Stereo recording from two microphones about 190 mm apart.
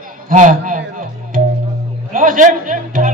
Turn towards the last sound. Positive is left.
turn(degrees=-45)  # may be behind; listen again after turning